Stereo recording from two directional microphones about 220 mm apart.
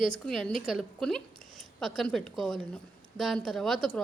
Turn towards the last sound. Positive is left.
turn(degrees=0)  # may be behind; listen again after turning